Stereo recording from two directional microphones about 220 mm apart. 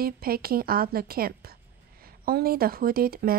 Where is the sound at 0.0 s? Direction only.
45° right (ahead or behind).